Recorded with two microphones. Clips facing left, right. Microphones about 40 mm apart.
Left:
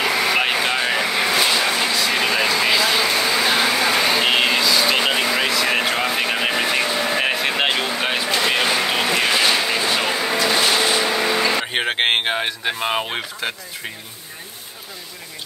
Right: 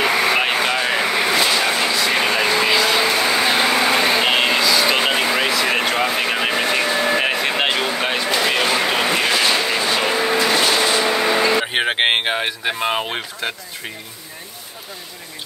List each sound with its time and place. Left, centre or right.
0.0 s vehicle: centre
4.2 s vehicle: centre
11.1 s vehicle: centre